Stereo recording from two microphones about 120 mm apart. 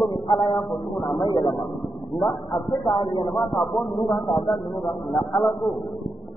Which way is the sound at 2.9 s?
45° left (ahead or behind).